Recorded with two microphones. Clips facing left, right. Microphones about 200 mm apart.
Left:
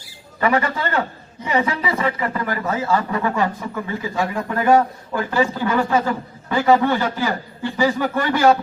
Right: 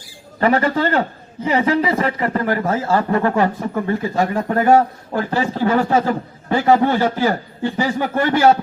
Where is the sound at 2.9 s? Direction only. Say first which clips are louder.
Right 5 dB; 50° right (ahead or behind).